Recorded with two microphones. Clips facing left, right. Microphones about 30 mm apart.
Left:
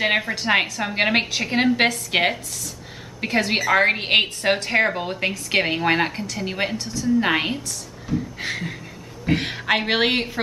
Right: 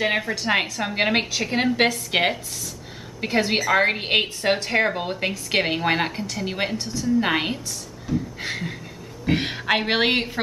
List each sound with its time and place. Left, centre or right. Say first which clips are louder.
0.0 s a woman's voice: left 2 dB; centre
6.8 s a woman's voice: even; centre
7.2 s a woman's voice: left 1 dB; centre
8.1 s a sound: left 1 dB; centre
9.3 s a woman's voice: left 1 dB; centre